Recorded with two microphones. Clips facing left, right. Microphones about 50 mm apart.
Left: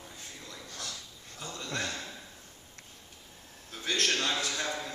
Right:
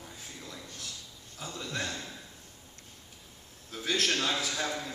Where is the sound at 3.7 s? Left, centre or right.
Centre.